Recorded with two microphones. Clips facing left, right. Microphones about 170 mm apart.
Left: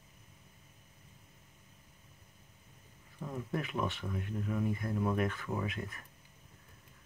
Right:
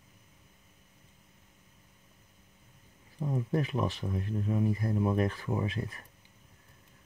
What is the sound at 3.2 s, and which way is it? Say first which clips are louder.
Speech: right 7 dB; 30° right (ahead or behind).